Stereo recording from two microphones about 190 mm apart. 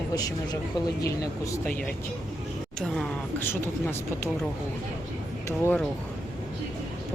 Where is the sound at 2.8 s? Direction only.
5° left (ahead or behind).